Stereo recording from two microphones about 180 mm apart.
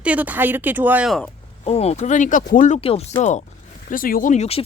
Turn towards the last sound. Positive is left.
turn(degrees=40)  # may be behind; listen again after turning